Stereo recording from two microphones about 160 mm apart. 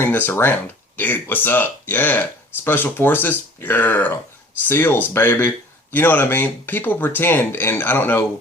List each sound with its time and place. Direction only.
0.0 s speech: 15° left (ahead or behind)